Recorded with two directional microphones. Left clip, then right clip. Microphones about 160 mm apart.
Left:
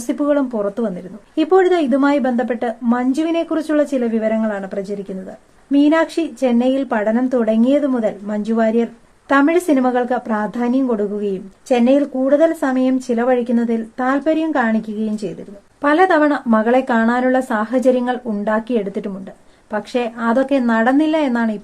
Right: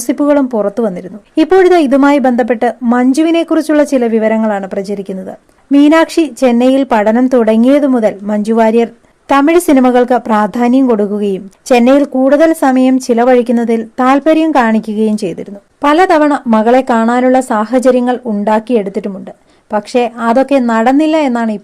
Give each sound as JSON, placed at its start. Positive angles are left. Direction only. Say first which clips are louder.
{"t": 0.1, "sound": "speech", "louder": "right 7 dB", "side_deg": -40}
{"t": 15.8, "sound": "a woman's voice", "louder": "right 5 dB", "side_deg": -35}